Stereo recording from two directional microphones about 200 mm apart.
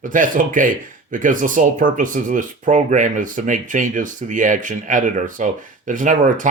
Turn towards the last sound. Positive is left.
turn(degrees=-40)  # may be behind; listen again after turning